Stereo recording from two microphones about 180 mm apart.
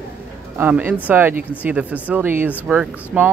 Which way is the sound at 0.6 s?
10° right (ahead or behind).